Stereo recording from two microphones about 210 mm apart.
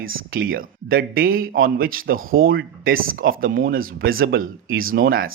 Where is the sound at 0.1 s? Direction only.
45° right (ahead or behind).